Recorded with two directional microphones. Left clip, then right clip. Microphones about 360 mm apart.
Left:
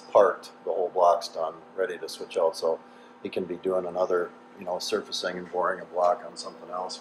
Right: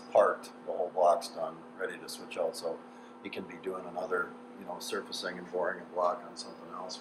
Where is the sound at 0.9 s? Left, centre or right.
Centre.